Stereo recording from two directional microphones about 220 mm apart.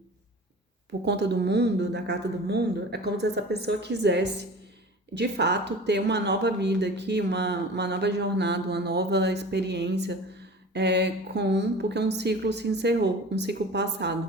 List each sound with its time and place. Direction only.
1.0 s speech: 50° right (ahead or behind)